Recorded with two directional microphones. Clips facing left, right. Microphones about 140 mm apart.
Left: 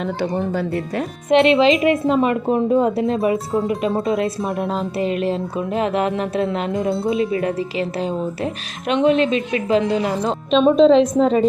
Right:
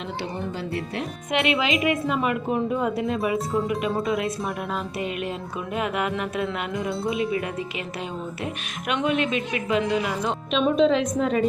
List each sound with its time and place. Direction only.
0.5 s speech: 45° left (ahead or behind)
1.3 s speech: 25° left (ahead or behind)
3.3 s speech: centre (ahead or behind)
4.0 s speech: 25° left (ahead or behind)